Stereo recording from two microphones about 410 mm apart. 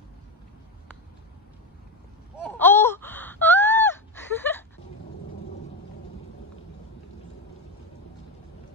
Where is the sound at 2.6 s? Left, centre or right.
Centre.